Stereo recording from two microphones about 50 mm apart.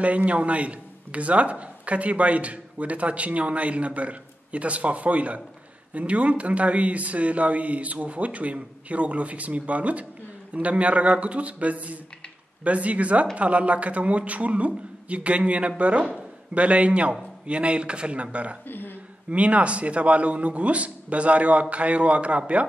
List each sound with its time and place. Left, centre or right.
0.0 s speech: right
18.7 s a sound: left
19.3 s speech: right